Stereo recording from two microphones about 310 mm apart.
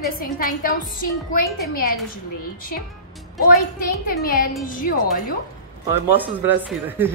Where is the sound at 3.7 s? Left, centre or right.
Left.